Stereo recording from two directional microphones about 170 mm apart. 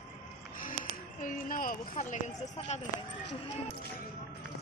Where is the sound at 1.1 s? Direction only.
55° left (ahead or behind).